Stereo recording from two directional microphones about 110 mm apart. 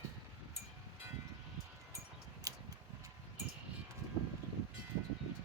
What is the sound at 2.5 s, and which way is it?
Tick-tock, 35° right (ahead or behind).